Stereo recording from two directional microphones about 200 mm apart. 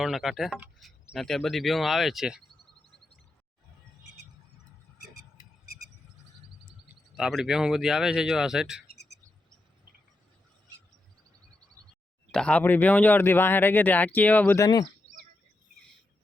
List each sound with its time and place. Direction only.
0.0 s speech: centre (ahead or behind)
7.2 s speech: centre (ahead or behind)
8.9 s a sound: 55° left (ahead or behind)
12.3 s speech: 5° left (ahead or behind)